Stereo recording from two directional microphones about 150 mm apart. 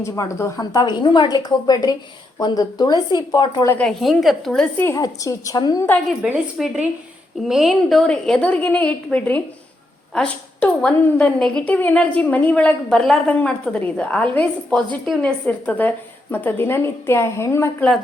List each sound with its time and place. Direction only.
0.0 s a woman's voice: 20° left (ahead or behind)
3.7 s a woman's voice: 5° left (ahead or behind)
4.9 s a woman's voice: 25° left (ahead or behind)
6.2 s a woman's voice: 5° right (ahead or behind); by 17.8 s 15° left (ahead or behind)